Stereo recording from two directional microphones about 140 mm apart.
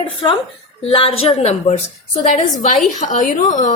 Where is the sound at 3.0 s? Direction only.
60° left (ahead or behind).